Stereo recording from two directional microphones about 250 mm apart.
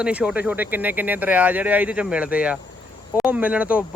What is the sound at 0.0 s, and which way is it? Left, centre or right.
Speech, centre.